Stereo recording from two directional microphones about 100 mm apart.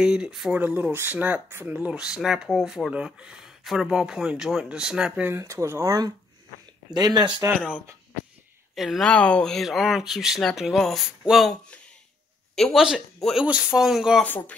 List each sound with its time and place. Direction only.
0.0 s speech: 5° right (ahead or behind)
0.6 s speech: 15° right (ahead or behind)
5.2 s speech: 30° right (ahead or behind)
6.9 s speech: 45° right (ahead or behind)
8.7 s speech: centre (ahead or behind)
12.5 s speech: 5° left (ahead or behind)